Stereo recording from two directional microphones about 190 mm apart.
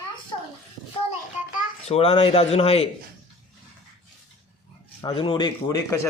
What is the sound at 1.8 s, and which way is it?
Speech, 30° left (ahead or behind).